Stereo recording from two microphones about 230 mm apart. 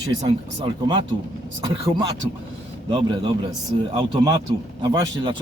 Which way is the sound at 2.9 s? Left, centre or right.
Right.